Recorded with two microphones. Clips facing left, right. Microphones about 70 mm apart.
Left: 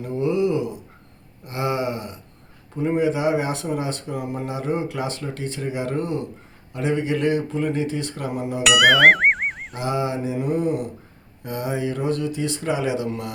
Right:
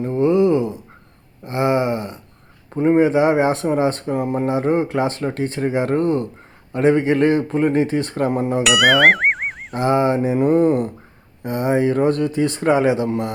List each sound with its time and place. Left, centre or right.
0.1 s a sound: right
2.7 s speech: right
8.6 s speech: centre
9.7 s mantra: right
11.4 s speech: right